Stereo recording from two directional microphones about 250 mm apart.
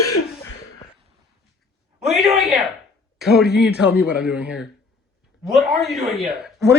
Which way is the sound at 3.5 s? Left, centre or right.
Left.